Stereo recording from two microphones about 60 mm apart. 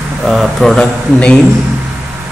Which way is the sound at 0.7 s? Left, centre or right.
Centre.